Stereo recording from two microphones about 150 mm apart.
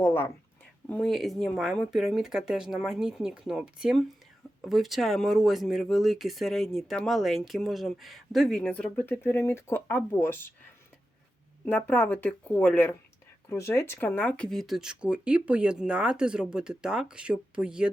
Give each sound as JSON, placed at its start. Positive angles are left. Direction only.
{"t": 0.0, "sound": "speech", "side_deg": 15}
{"t": 0.9, "sound": "speech", "side_deg": 5}
{"t": 11.6, "sound": "speech", "side_deg": 10}